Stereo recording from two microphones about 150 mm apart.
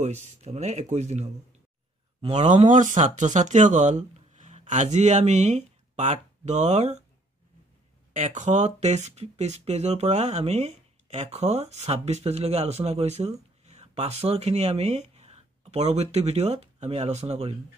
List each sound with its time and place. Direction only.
0.0 s speech: 50° right (ahead or behind)
8.1 s speech: 55° right (ahead or behind)